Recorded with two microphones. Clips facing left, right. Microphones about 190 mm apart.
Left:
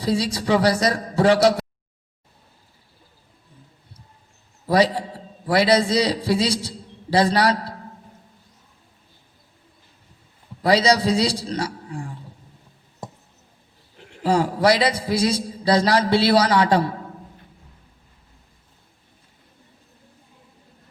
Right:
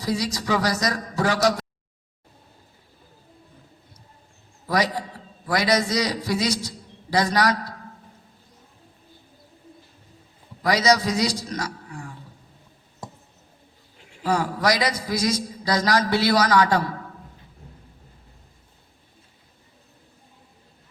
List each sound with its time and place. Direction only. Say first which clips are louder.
0.0 s a man's voice: left 4 dB; 30° left (ahead or behind)
4.7 s a man's voice: left 5 dB; 30° left (ahead or behind)
10.6 s a man's voice: left 3 dB; 30° left (ahead or behind)
14.0 s a sound: left 6 dB; 60° left (ahead or behind)
14.3 s a man's voice: left 4 dB; 30° left (ahead or behind)